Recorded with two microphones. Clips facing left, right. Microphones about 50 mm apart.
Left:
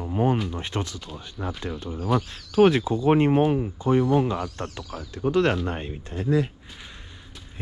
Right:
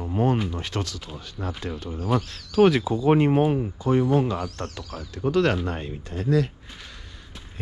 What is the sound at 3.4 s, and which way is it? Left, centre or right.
Speech, centre.